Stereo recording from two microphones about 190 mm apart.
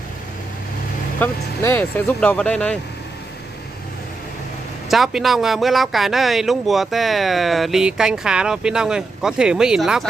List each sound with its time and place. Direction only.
1.2 s speech: 10° left (ahead or behind)
4.8 s a man's voice: centre (ahead or behind)